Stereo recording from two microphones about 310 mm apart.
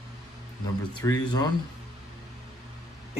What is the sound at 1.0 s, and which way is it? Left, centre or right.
Speech, centre.